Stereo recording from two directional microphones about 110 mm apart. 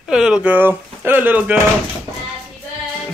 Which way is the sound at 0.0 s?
5° right (ahead or behind).